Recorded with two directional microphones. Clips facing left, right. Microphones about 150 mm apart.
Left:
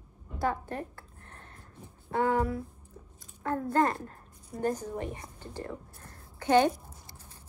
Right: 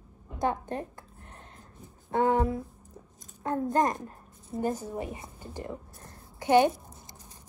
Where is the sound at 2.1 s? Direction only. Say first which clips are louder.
Right 2 dB; 20° right (ahead or behind).